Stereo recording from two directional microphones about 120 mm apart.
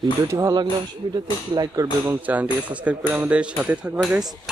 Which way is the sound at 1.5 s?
30° right (ahead or behind).